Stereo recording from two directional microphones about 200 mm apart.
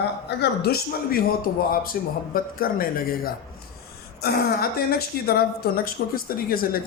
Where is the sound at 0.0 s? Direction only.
55° left (ahead or behind).